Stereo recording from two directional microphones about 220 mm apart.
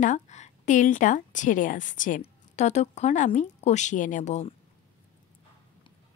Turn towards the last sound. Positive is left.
turn(degrees=30)  # may be behind; listen again after turning